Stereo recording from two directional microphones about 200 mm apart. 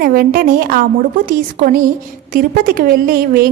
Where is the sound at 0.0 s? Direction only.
50° right (ahead or behind).